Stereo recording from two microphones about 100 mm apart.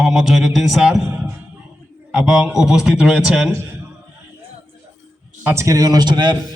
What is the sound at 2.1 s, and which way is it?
A man's voice, 5° right (ahead or behind).